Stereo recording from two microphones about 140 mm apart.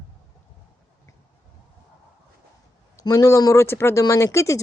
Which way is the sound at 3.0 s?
25° left (ahead or behind).